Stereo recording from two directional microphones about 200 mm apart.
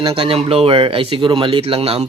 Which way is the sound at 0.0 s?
25° right (ahead or behind).